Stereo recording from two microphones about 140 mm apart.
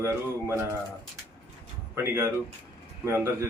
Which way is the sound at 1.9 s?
15° right (ahead or behind).